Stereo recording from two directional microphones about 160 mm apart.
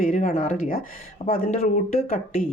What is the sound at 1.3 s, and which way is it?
Speech, 60° left (ahead or behind).